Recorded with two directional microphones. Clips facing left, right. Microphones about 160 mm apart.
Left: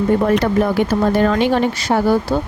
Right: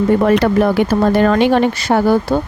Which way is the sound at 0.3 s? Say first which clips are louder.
Right 3 dB; 75° right (ahead or behind).